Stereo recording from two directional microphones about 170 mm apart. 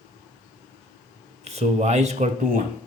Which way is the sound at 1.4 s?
40° right (ahead or behind).